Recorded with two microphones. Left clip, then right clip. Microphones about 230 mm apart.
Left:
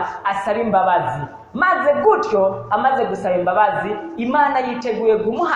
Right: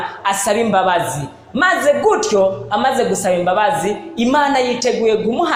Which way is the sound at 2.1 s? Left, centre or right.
Right.